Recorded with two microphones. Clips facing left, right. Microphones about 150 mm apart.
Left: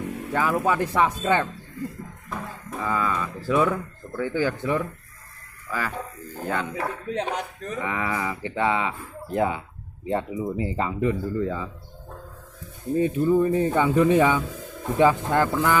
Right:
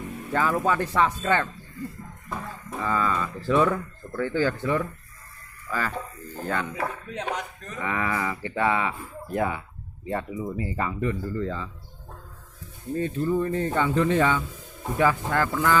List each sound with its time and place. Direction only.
0.3 s speech: 10° left (ahead or behind)
2.8 s speech: 10° left (ahead or behind)
4.2 s speech: 15° left (ahead or behind)
6.7 s speech: 30° left (ahead or behind)
7.8 s speech: 15° left (ahead or behind)
12.9 s speech: 15° left (ahead or behind)